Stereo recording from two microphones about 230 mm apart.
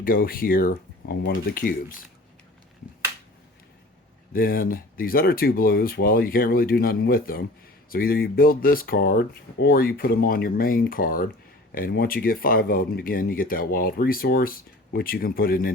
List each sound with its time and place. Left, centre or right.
0.0 s speech: left
4.3 s speech: left